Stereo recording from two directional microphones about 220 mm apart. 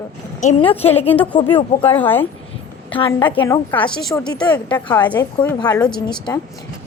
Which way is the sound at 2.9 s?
20° left (ahead or behind).